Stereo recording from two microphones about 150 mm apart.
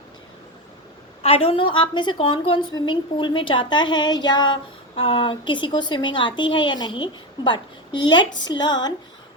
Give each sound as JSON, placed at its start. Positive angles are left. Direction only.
{"t": 1.2, "sound": "a woman's voice", "side_deg": 40}